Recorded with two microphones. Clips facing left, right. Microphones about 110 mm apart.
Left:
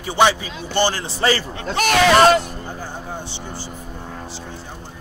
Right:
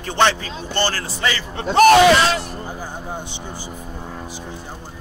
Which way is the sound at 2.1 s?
50° left (ahead or behind).